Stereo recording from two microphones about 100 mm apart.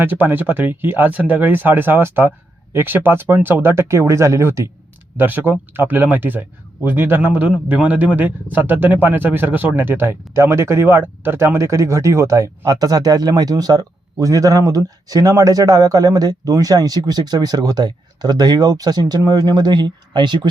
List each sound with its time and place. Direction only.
0.0 s a man's voice: 20° right (ahead or behind); by 20.5 s 50° right (ahead or behind)